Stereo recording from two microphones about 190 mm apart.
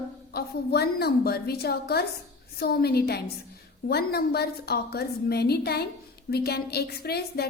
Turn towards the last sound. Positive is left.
turn(degrees=55)  # may be behind; listen again after turning